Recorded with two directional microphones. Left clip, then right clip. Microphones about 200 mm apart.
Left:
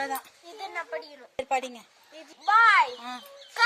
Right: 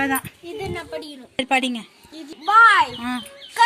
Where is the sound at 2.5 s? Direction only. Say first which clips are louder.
Right 6 dB; 20° left (ahead or behind).